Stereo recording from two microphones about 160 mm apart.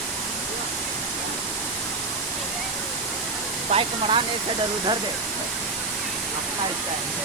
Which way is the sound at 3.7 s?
35° right (ahead or behind).